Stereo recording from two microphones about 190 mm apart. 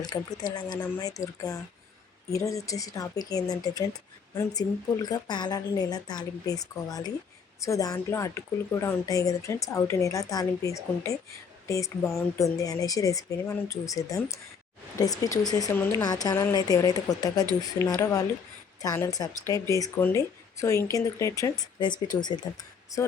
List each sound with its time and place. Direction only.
0.0 s a woman's voice: 20° left (ahead or behind)
5.0 s a woman's voice: 20° left (ahead or behind)